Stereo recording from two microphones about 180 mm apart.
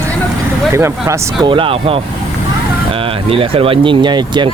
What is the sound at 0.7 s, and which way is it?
Speech, 15° right (ahead or behind).